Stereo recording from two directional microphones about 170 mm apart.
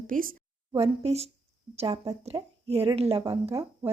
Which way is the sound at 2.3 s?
20° right (ahead or behind).